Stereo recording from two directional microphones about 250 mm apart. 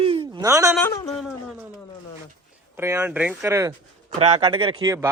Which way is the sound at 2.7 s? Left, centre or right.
Centre.